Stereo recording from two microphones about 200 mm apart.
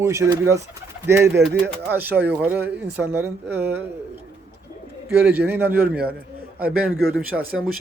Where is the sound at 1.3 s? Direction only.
55° right (ahead or behind).